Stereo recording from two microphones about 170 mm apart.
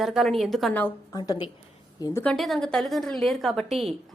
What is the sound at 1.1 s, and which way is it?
Speech, 25° left (ahead or behind).